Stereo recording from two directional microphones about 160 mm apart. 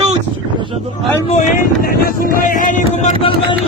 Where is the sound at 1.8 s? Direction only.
70° left (ahead or behind); by 3.3 s 45° left (ahead or behind).